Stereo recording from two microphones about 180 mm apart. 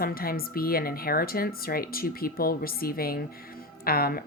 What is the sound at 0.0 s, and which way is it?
Speech, 55° left (ahead or behind).